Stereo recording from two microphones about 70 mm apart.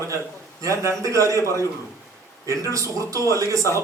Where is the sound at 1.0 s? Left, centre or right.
Right.